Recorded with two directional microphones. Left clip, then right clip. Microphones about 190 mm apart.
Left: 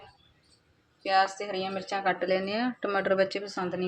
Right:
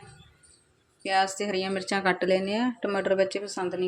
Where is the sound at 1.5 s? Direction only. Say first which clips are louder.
Right 3 dB; 40° right (ahead or behind).